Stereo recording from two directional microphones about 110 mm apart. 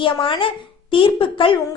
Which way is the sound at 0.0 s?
50° left (ahead or behind).